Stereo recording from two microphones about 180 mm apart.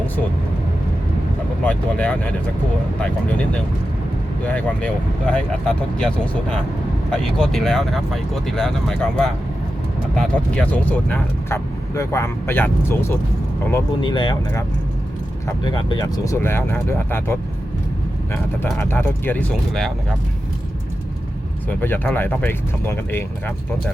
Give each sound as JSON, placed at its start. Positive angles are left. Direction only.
{"t": 1.6, "sound": "speech", "side_deg": 5}
{"t": 14.0, "sound": "speech", "side_deg": 25}
{"t": 18.8, "sound": "speech", "side_deg": 15}
{"t": 21.7, "sound": "speech", "side_deg": 10}